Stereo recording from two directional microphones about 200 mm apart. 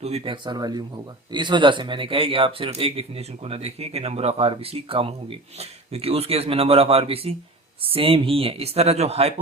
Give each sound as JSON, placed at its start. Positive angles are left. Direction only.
{"t": 0.0, "sound": "speech", "side_deg": -30}